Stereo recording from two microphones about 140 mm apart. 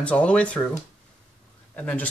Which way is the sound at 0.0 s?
10° left (ahead or behind).